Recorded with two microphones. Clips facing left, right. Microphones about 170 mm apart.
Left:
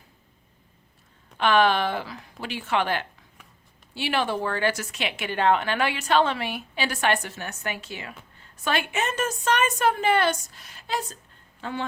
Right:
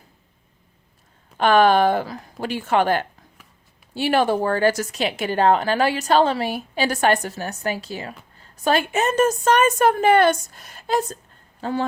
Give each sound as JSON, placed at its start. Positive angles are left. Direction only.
{"t": 1.4, "sound": "a woman's voice", "side_deg": -45}